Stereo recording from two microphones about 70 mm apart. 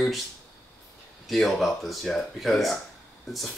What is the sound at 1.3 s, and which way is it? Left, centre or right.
Speech, centre.